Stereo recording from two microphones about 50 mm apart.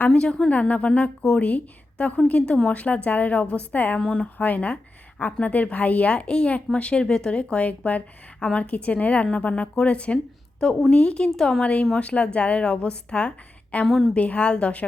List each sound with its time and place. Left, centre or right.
0.1 s a woman's voice: centre
4.0 s speech: centre
4.4 s a woman's voice: left
13.8 s a woman's voice: centre
14.2 s a woman's voice: left